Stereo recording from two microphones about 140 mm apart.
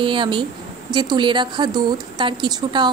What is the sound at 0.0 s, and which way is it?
Speech, 35° right (ahead or behind).